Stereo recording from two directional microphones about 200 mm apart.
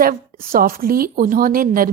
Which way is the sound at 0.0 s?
45° right (ahead or behind).